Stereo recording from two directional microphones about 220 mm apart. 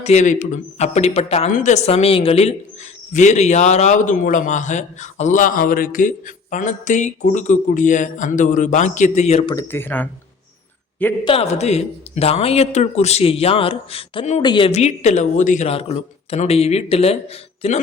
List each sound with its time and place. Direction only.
0.0 s a man's voice: 30° left (ahead or behind)
9.6 s speech: 10° left (ahead or behind)
11.3 s speech: 25° left (ahead or behind)